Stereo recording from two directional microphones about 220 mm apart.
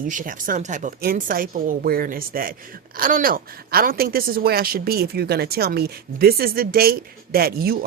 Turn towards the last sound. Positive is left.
turn(degrees=-45)  # may be behind; listen again after turning